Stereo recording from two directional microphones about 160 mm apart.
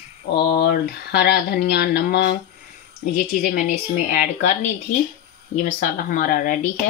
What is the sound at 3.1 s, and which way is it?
Speech, 65° left (ahead or behind).